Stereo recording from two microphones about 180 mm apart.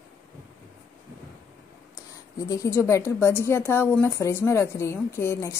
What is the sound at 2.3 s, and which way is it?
A woman's voice, 20° left (ahead or behind).